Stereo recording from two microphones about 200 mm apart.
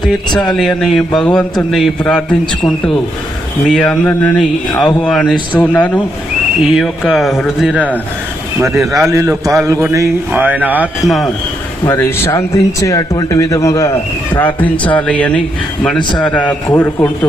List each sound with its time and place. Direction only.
0.0 s a man's voice: centre (ahead or behind)
11.9 s speech: 10° left (ahead or behind)